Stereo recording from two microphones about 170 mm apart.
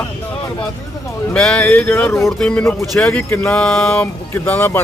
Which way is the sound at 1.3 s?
5° left (ahead or behind).